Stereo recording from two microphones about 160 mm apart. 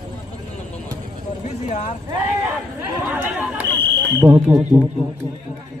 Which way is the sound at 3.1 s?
10° right (ahead or behind).